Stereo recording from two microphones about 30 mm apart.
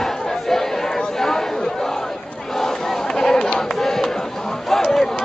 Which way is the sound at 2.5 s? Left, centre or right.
Centre.